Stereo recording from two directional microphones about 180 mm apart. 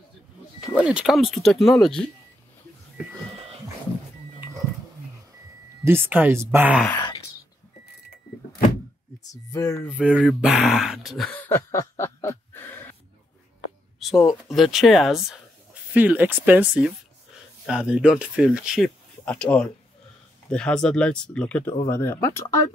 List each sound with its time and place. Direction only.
0.7 s speech: 5° right (ahead or behind)
5.9 s speech: 10° right (ahead or behind)
9.2 s a sound: 20° left (ahead or behind)
9.8 s speech: 5° right (ahead or behind); by 12.9 s 10° left (ahead or behind)
13.9 s speech: centre (ahead or behind)
19.2 s speech: 5° left (ahead or behind)